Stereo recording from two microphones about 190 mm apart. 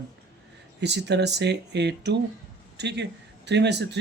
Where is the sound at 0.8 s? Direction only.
65° right (ahead or behind).